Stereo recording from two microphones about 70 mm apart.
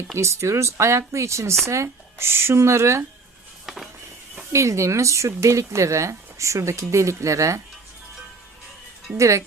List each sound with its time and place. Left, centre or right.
0.2 s speech: right
4.5 s speech: right
9.1 s speech: right